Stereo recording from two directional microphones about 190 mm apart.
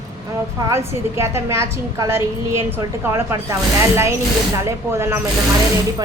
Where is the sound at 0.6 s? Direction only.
15° right (ahead or behind).